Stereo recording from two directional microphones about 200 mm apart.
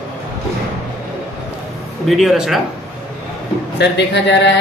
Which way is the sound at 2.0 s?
Centre (ahead or behind).